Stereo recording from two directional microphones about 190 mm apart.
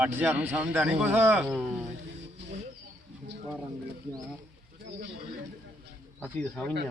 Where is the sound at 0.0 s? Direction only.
10° right (ahead or behind).